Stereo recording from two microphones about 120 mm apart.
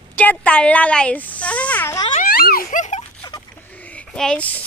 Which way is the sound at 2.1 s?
90° left.